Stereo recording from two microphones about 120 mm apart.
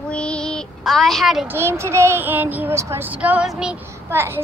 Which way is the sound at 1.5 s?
20° right (ahead or behind).